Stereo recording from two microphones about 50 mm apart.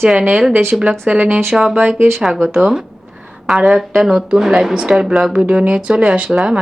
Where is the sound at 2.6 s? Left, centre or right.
Centre.